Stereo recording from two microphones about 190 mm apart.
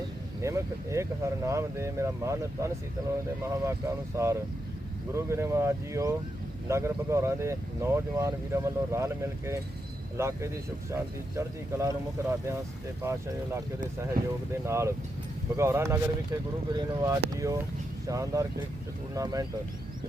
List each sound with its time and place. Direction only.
0.4 s speech: 15° right (ahead or behind)
14.2 s speech: 50° right (ahead or behind)
14.6 s speech: 15° right (ahead or behind)